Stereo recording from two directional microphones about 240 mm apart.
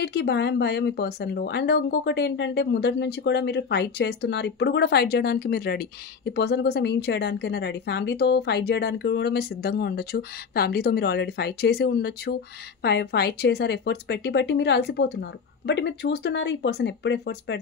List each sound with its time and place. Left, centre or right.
0.0 s speech: left